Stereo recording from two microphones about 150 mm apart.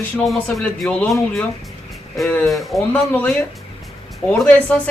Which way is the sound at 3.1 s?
10° left (ahead or behind).